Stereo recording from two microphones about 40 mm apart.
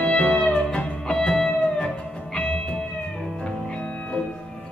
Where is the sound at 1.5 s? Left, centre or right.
Left.